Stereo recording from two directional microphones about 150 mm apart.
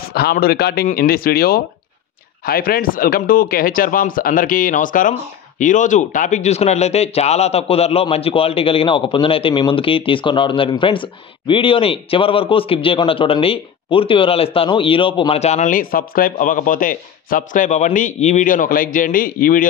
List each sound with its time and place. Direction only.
0.1 s speech: 90° left; by 19.7 s 70° left (ahead or behind)